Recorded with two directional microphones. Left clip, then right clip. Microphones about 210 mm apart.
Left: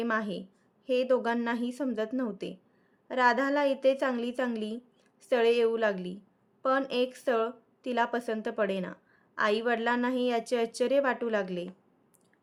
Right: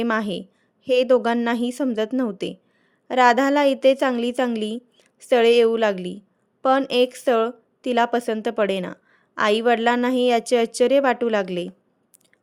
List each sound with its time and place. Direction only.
0.0 s a woman's voice: 40° right (ahead or behind)